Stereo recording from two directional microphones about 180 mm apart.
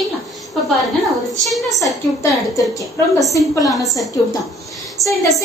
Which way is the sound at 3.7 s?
Centre (ahead or behind).